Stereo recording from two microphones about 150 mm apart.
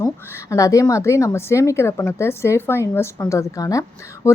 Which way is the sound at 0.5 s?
20° left (ahead or behind).